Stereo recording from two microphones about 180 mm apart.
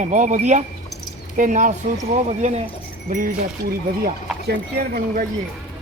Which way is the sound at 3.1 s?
45° right (ahead or behind).